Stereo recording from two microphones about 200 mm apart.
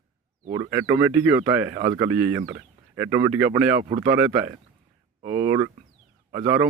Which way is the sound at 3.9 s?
25° right (ahead or behind).